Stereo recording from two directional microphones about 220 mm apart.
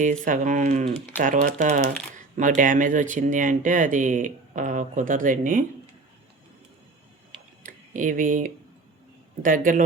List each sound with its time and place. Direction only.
0.0 s speech: 35° right (ahead or behind)
7.6 s tick-tock: 35° right (ahead or behind)
9.4 s speech: 35° right (ahead or behind)